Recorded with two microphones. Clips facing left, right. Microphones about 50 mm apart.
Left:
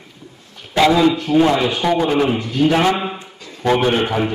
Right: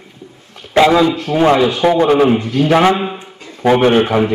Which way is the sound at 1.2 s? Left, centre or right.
Right.